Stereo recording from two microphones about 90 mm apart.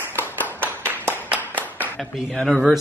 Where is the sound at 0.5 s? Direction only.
25° right (ahead or behind).